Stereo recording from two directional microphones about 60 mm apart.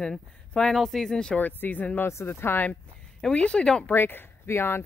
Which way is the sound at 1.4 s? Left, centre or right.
Left.